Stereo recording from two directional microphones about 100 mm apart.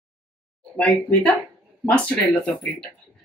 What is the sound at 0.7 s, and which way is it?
Speech, 10° left (ahead or behind).